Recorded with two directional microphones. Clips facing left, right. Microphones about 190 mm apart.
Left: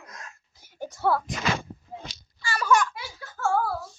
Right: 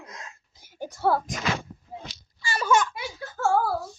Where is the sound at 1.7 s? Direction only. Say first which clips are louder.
Left 3 dB; 30° left (ahead or behind).